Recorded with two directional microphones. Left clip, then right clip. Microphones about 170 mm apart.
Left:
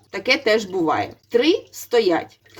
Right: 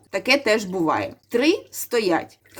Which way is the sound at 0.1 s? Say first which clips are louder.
Left 1 dB; 30° right (ahead or behind).